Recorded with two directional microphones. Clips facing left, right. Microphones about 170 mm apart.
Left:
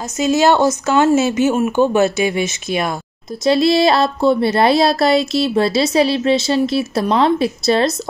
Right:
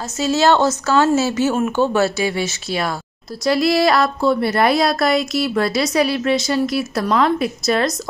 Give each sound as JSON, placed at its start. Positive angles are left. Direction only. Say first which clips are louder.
{"t": 0.2, "sound": "speech", "louder": "left 2 dB", "side_deg": 15}